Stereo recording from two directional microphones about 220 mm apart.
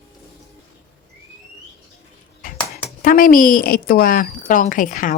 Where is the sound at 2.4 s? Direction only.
40° left (ahead or behind).